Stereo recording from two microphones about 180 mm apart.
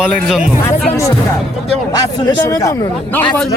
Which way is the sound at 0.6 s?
15° left (ahead or behind).